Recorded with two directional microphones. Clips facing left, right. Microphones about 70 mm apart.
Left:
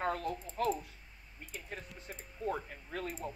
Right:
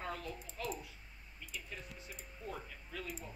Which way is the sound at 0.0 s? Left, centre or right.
Left.